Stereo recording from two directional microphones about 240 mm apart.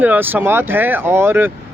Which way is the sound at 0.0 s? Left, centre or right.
Centre.